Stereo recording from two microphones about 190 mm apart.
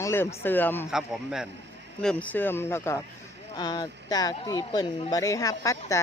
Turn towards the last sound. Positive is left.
turn(degrees=15)  # may be behind; listen again after turning